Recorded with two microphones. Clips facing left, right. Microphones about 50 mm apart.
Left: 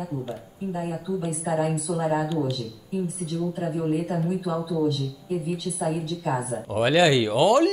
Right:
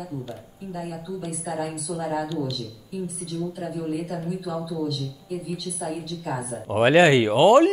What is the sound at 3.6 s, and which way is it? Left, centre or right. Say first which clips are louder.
A woman's voice: left 3 dB; left.